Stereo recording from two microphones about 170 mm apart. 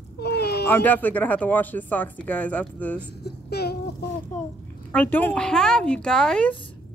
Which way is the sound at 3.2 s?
70° left (ahead or behind).